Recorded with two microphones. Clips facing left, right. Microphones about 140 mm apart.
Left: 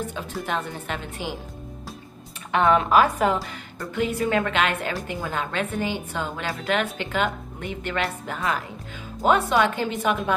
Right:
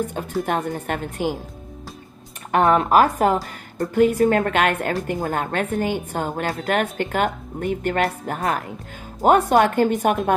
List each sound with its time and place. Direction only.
0.1 s a woman's voice: 50° right (ahead or behind)
2.5 s a woman's voice: 45° right (ahead or behind)
3.7 s a woman's voice: 55° right (ahead or behind)